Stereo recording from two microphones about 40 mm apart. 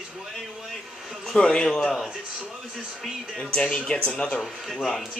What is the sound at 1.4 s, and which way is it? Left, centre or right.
Speech, left.